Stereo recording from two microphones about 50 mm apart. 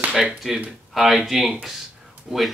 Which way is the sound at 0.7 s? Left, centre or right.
Centre.